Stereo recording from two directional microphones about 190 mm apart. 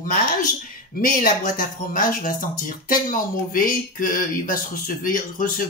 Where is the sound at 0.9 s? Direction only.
50° left (ahead or behind).